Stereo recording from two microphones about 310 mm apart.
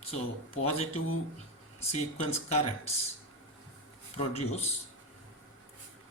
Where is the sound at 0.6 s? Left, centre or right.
Centre.